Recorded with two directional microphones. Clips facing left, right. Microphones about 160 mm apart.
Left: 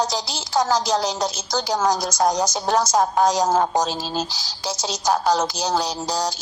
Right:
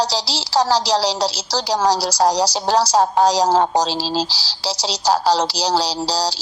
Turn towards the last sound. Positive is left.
turn(degrees=-35)  # may be behind; listen again after turning